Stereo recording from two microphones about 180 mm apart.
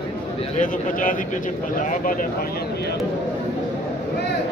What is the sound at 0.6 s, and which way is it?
A man's voice, 50° left (ahead or behind).